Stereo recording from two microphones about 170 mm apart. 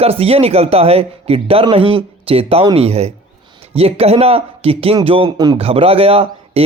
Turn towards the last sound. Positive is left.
turn(degrees=-35)  # may be behind; listen again after turning